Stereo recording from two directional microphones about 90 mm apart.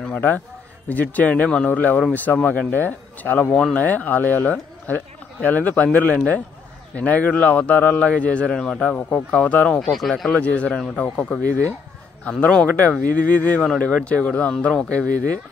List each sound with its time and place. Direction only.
0.0 s a sound: 20° left (ahead or behind)
0.8 s a man's voice: 20° left (ahead or behind)
7.0 s a man's voice: 15° left (ahead or behind)
9.8 s speech: centre (ahead or behind)
10.3 s a man's voice: 15° left (ahead or behind)